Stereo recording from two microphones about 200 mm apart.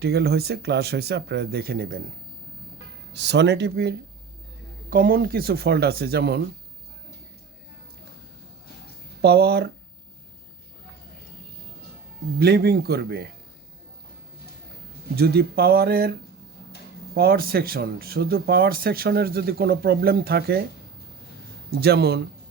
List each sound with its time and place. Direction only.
0.0 s speech: 55° right (ahead or behind)
3.2 s speech: 60° right (ahead or behind)
9.2 s speech: 50° right (ahead or behind)
12.4 s speech: 50° right (ahead or behind)
15.1 s speech: 50° right (ahead or behind)
17.2 s speech: 50° right (ahead or behind)
21.8 s speech: 55° right (ahead or behind)